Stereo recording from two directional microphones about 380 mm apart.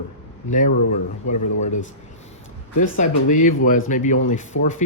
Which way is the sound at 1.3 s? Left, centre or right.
Left.